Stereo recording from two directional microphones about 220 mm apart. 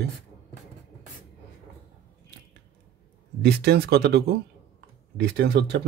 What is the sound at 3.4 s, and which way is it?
Speech, 45° right (ahead or behind).